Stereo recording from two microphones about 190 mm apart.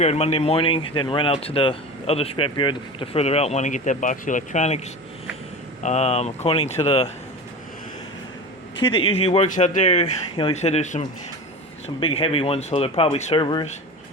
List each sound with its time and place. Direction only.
0.0 s speech: 35° left (ahead or behind)
5.8 s speech: 35° left (ahead or behind)
8.8 s speech: 30° left (ahead or behind)